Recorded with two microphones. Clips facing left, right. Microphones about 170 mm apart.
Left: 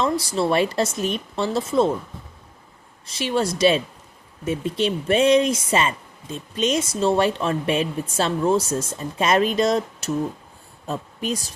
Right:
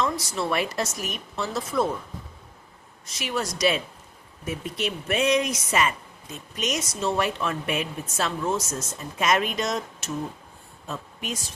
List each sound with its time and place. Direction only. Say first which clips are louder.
0.0 s speech: left 5 dB; 30° left (ahead or behind)
3.1 s a woman's voice: left 7 dB; 30° left (ahead or behind)